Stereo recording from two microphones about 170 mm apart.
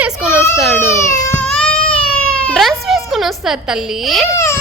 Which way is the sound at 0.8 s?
15° left (ahead or behind).